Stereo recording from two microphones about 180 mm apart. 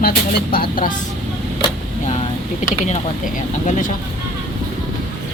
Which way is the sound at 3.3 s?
45° left (ahead or behind).